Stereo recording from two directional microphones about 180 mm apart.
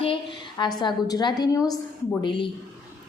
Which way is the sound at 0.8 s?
20° left (ahead or behind).